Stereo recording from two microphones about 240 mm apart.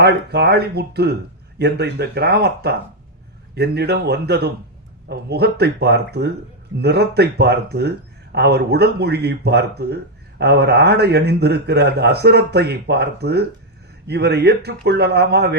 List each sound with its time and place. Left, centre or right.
0.0 s speech: right